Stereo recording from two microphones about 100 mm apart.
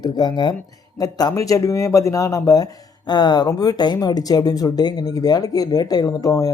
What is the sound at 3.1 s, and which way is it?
Speech, 45° left (ahead or behind).